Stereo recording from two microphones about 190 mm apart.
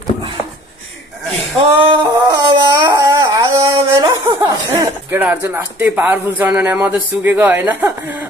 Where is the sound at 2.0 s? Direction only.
20° right (ahead or behind).